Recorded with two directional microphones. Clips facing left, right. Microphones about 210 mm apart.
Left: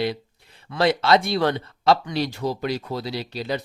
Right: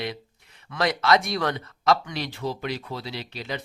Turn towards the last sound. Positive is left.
turn(degrees=35)  # may be behind; listen again after turning